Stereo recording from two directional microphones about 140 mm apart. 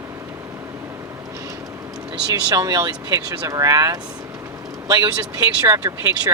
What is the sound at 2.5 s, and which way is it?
Speech, 25° right (ahead or behind).